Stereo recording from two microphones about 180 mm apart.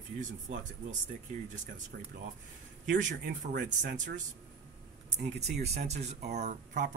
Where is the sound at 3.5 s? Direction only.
50° right (ahead or behind).